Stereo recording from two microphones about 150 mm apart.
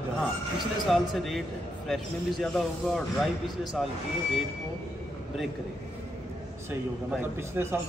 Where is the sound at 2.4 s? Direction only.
5° left (ahead or behind).